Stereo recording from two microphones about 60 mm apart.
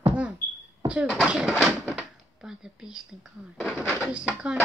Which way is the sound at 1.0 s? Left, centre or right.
Centre.